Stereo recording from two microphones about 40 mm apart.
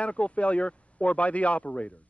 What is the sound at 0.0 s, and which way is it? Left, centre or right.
A man's voice, left.